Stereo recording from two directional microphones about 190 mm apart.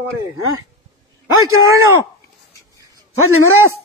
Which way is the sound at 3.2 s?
90° right.